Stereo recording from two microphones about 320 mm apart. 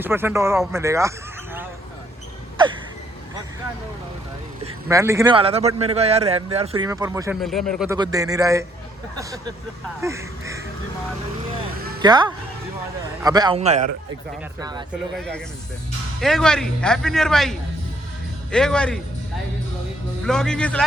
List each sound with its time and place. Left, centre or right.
0.0 s a man's voice: centre
4.6 s a man's voice: centre
7.9 s a man's voice: centre
10.0 s speech: centre
12.0 s a man's voice: centre
16.2 s speech: centre
20.2 s speech: centre